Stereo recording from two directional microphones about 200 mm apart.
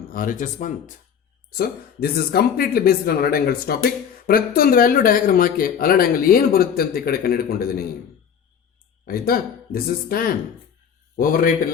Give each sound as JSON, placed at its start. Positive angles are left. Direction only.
{"t": 0.1, "sound": "speech", "side_deg": 45}
{"t": 9.0, "sound": "speech", "side_deg": 50}